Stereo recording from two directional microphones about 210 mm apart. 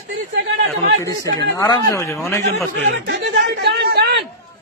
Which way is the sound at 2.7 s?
55° right (ahead or behind).